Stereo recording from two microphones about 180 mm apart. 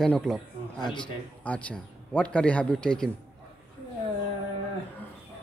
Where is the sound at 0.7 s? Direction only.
25° left (ahead or behind).